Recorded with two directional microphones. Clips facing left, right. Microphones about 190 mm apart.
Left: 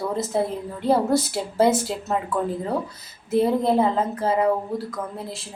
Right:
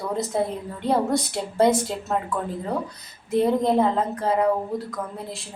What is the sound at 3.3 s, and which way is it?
A woman's voice, 5° left (ahead or behind).